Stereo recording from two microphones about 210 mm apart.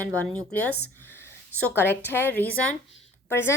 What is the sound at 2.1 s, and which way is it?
A woman's voice, 10° left (ahead or behind).